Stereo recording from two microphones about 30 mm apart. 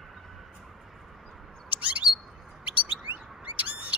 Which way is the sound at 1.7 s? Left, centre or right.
Right.